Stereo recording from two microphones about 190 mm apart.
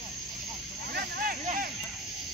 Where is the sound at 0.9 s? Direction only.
50° right (ahead or behind).